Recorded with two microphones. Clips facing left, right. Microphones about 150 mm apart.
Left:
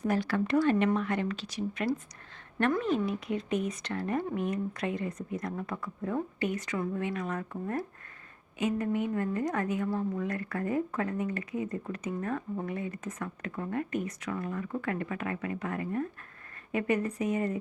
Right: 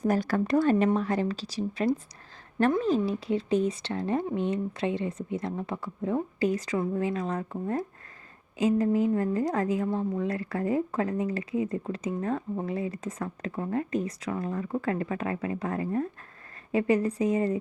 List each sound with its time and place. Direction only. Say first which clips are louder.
0.0 s a woman's voice: right 3 dB; 40° right (ahead or behind)